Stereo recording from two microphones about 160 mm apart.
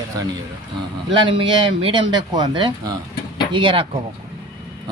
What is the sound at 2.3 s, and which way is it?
A man's voice, 25° right (ahead or behind).